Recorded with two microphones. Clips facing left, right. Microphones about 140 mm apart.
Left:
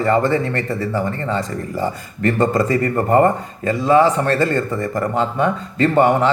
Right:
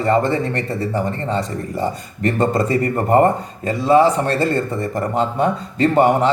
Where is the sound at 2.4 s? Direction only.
25° right (ahead or behind).